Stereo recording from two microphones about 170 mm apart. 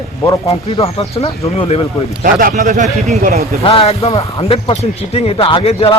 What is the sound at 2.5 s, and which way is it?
Speech, 45° right (ahead or behind).